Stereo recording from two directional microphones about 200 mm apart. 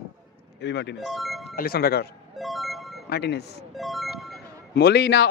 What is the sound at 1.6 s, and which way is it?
Speech, 50° left (ahead or behind).